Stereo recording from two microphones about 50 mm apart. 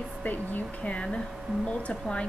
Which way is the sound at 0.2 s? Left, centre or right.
Left.